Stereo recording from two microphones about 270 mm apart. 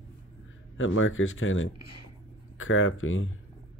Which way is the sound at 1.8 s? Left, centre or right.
Left.